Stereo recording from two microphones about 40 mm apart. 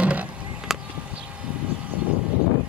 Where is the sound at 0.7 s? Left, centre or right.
Centre.